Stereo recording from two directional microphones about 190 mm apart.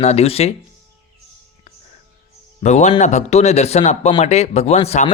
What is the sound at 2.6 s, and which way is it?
Speech, 40° left (ahead or behind).